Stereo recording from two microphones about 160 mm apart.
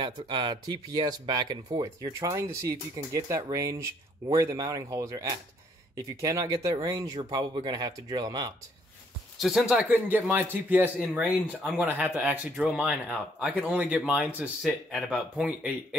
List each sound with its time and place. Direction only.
0.0 s speech: 30° right (ahead or behind)
9.4 s a man's voice: centre (ahead or behind)